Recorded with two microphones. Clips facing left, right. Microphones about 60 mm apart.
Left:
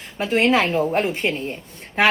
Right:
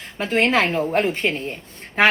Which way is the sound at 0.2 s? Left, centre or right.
Right.